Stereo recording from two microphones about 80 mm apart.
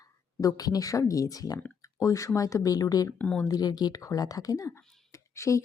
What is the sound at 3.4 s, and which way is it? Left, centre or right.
A woman's voice, left.